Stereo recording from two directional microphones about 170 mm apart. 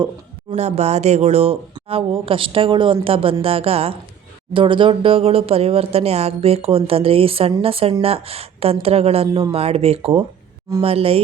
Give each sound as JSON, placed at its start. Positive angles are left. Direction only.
{"t": 0.5, "sound": "speech", "side_deg": -40}